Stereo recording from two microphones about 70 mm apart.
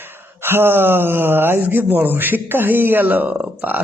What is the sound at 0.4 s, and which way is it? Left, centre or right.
Speech, right.